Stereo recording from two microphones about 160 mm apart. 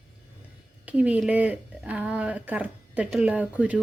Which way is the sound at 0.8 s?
10° right (ahead or behind).